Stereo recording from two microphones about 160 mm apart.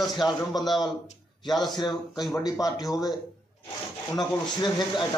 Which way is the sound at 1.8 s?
25° left (ahead or behind).